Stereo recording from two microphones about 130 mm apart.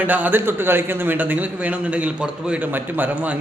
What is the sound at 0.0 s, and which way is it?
A man's voice, 10° right (ahead or behind).